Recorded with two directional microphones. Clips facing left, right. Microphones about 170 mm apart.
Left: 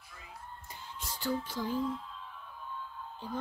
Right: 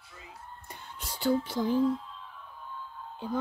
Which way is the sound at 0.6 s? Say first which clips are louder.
Right 1 dB; 65° right (ahead or behind).